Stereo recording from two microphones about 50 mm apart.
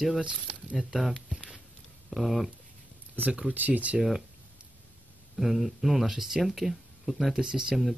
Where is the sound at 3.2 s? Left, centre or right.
Right.